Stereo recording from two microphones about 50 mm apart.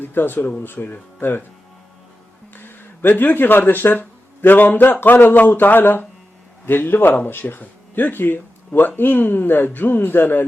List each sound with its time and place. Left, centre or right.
0.0 s speech: left
2.6 s a sound: left
3.6 s a man's voice: left